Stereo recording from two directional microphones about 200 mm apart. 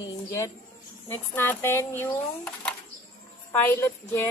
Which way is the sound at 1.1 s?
10° left (ahead or behind).